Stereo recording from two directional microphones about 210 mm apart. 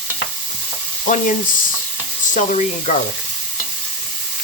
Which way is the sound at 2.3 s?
35° left (ahead or behind).